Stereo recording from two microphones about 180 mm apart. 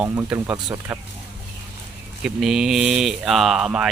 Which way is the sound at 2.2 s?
Centre (ahead or behind).